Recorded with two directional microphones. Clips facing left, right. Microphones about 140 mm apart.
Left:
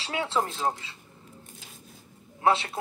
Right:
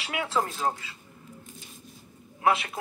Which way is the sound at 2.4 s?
30° left (ahead or behind).